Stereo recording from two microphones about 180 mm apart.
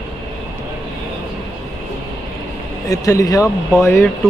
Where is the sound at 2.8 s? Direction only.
20° left (ahead or behind).